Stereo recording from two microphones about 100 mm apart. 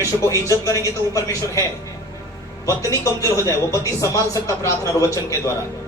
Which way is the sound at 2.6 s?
30° left (ahead or behind).